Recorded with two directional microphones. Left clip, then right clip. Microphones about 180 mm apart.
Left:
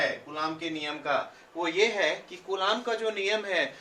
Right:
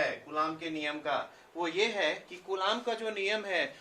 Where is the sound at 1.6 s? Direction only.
20° right (ahead or behind).